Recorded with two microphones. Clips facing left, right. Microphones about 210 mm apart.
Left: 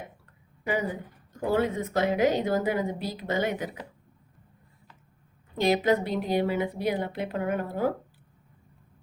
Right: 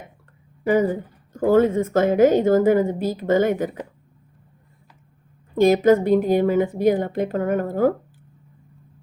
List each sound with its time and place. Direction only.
0.6 s a woman's voice: 45° right (ahead or behind)
5.5 s a woman's voice: 45° right (ahead or behind)